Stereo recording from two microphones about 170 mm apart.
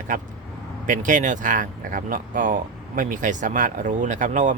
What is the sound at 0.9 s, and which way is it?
Speech, 50° right (ahead or behind).